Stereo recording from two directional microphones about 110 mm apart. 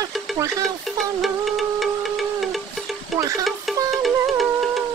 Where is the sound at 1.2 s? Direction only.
Centre (ahead or behind).